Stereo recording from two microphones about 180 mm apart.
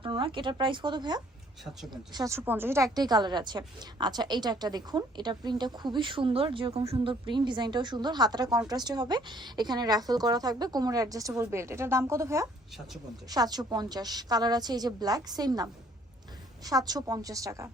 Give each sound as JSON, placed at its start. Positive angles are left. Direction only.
{"t": 0.0, "sound": "a woman's voice", "side_deg": -30}